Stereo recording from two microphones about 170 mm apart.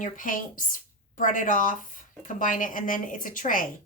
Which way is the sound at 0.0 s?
50° left (ahead or behind).